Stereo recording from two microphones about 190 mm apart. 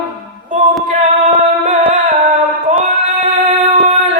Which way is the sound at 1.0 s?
40° right (ahead or behind).